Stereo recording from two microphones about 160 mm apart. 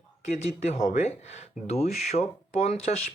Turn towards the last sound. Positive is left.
turn(degrees=45)  # may be behind; listen again after turning